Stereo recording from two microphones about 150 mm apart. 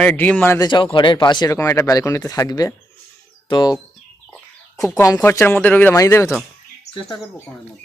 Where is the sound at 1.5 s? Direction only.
20° left (ahead or behind).